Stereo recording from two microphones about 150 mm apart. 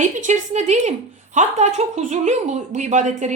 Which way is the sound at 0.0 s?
50° right (ahead or behind).